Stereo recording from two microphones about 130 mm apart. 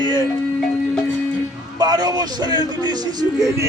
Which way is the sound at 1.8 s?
30° right (ahead or behind).